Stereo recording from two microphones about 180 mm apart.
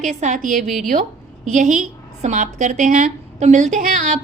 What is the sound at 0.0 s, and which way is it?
A woman's voice, 40° right (ahead or behind).